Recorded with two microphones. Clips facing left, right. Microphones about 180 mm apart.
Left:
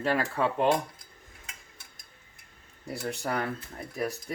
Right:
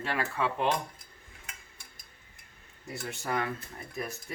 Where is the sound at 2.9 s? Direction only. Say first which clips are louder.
Left 2 dB; 35° left (ahead or behind).